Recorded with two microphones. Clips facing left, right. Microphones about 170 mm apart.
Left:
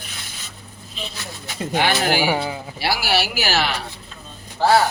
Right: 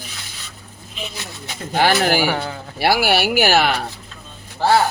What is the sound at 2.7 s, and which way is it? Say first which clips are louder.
Speech: right 6 dB; 55° right (ahead or behind).